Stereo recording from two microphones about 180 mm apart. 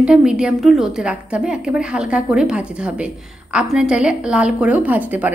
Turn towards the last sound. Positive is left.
turn(degrees=-10)  # may be behind; listen again after turning